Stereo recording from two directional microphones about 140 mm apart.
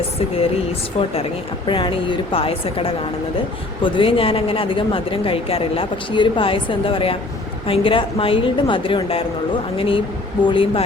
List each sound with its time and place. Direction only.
0.2 s a woman's voice: 45° left (ahead or behind)